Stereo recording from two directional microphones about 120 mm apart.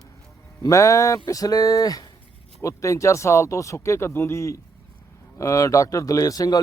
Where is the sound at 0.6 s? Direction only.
25° left (ahead or behind).